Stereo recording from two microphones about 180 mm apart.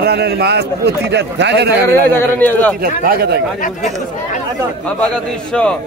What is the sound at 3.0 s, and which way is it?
Speech, 60° right (ahead or behind).